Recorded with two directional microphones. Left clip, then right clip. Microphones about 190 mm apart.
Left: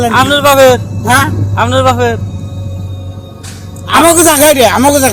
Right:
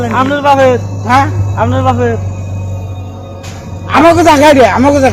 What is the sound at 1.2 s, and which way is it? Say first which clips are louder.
Speech: even; 55° left (ahead or behind).